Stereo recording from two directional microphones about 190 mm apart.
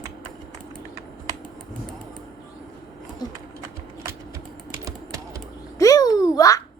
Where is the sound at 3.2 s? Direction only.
20° left (ahead or behind).